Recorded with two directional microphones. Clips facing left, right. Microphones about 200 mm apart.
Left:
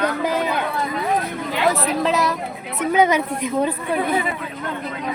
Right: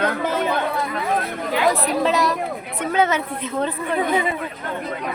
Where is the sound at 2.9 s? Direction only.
10° left (ahead or behind).